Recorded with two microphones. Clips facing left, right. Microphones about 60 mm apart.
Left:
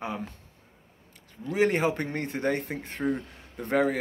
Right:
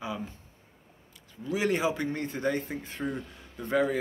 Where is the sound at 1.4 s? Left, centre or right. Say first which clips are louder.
Left 3 dB; left.